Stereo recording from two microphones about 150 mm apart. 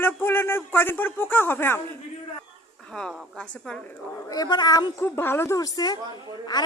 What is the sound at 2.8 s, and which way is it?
A woman's voice, 5° left (ahead or behind).